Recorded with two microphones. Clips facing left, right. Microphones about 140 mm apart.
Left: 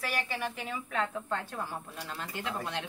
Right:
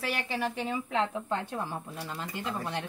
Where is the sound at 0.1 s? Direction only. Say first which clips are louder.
Right 2 dB; 25° right (ahead or behind).